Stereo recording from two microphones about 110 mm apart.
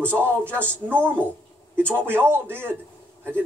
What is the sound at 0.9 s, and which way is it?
Speech, 20° right (ahead or behind).